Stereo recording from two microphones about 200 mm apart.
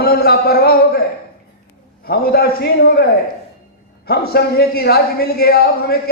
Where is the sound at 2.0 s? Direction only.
50° left (ahead or behind).